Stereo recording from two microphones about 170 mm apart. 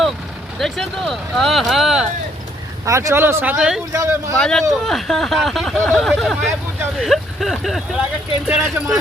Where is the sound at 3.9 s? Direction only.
15° right (ahead or behind).